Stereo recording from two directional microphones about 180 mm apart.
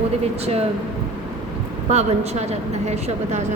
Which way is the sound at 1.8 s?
35° right (ahead or behind).